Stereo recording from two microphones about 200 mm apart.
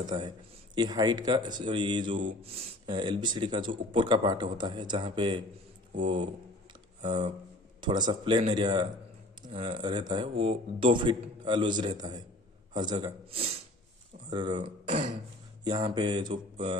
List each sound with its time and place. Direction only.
0.0 s speech: 20° right (ahead or behind)
7.0 s speech: 25° right (ahead or behind)